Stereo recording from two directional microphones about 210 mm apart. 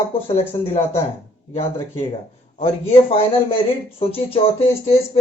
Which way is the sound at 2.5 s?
25° left (ahead or behind).